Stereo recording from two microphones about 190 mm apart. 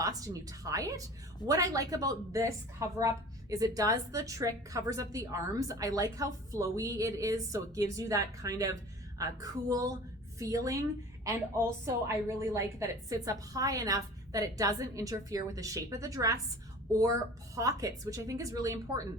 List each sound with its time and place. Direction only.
0.0 s a woman's voice: 20° right (ahead or behind)
17.5 s a woman's voice: 15° right (ahead or behind)